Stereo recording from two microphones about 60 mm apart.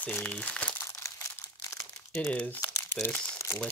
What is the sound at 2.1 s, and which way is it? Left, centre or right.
Speech, left.